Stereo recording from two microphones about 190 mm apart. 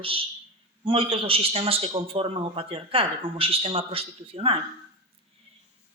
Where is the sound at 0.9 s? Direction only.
30° right (ahead or behind).